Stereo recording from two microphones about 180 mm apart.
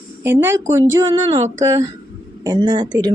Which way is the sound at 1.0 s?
25° right (ahead or behind).